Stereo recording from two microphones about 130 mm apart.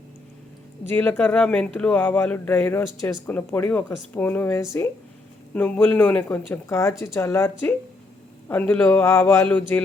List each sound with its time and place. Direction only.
0.9 s speech: 15° left (ahead or behind)